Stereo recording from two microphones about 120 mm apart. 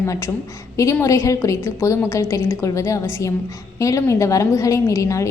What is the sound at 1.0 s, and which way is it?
A woman's voice, 25° left (ahead or behind).